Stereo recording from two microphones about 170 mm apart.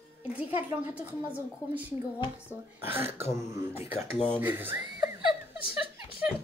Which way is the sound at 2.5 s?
15° right (ahead or behind).